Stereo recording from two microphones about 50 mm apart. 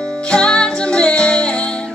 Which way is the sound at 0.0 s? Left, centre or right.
Left.